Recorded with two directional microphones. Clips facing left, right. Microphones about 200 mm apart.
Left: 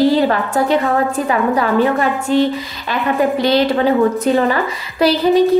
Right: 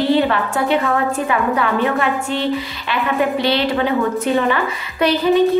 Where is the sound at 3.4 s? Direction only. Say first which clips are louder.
Left 4 dB; 40° left (ahead or behind).